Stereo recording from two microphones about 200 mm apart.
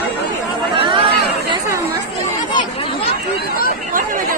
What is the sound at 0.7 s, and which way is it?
Chatter, 25° right (ahead or behind).